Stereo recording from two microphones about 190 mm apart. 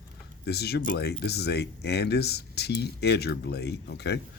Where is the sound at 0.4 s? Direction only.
60° left (ahead or behind).